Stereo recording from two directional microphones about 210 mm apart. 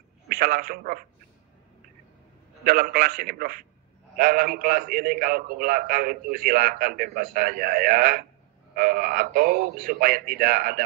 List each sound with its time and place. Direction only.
0.3 s a man's voice: 40° right (ahead or behind)
2.6 s a man's voice: 40° right (ahead or behind)